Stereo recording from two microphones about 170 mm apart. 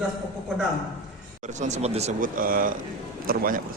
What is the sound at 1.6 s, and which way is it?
Speech, 40° right (ahead or behind).